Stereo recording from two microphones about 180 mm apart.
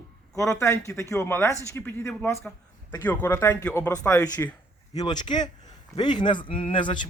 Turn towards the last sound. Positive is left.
turn(degrees=30)  # may be behind; listen again after turning